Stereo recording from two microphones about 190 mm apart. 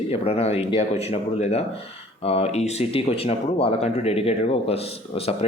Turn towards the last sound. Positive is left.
turn(degrees=30)  # may be behind; listen again after turning